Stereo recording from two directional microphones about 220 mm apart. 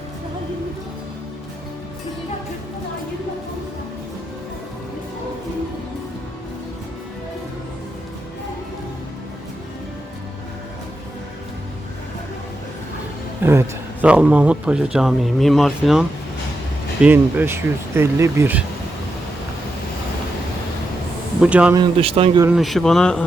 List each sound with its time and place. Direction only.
13.4 s a man's voice: 10° right (ahead or behind)
21.4 s speech: 5° right (ahead or behind)
21.8 s speech: 25° right (ahead or behind)
22.4 s speech: centre (ahead or behind)